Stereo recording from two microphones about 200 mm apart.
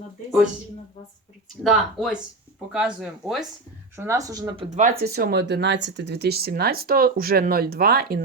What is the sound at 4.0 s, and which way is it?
Speech, 15° right (ahead or behind).